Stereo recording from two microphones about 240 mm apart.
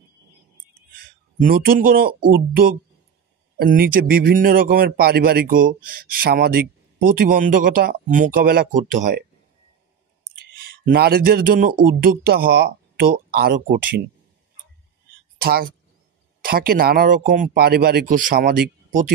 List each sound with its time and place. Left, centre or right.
1.4 s a man's voice: right
10.5 s a man's voice: right
15.3 s a man's voice: right